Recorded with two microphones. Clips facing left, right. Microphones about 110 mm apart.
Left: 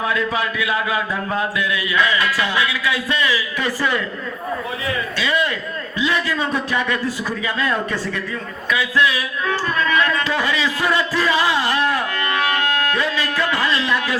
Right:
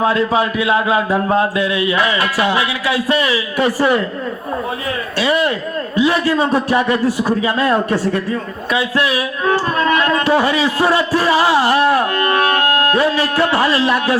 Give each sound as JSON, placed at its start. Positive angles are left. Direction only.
{"t": 0.0, "sound": "speech", "side_deg": -30}
{"t": 5.2, "sound": "speech", "side_deg": -20}
{"t": 9.5, "sound": "music", "side_deg": -45}
{"t": 10.2, "sound": "speech", "side_deg": -25}